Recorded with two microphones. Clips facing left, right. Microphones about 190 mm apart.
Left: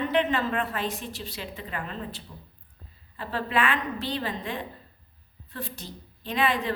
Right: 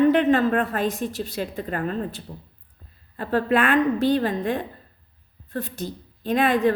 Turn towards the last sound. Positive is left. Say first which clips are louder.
# right 7 dB
turn(degrees=-50)  # may be behind; listen again after turning